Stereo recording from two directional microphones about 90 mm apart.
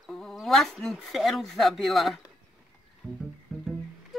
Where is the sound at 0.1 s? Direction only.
5° left (ahead or behind).